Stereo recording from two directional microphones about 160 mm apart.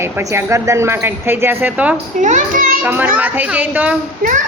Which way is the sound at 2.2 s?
50° right (ahead or behind).